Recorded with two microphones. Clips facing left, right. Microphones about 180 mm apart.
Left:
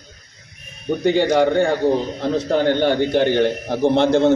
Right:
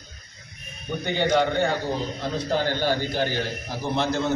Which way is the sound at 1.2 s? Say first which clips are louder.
Left 2 dB; 65° left (ahead or behind).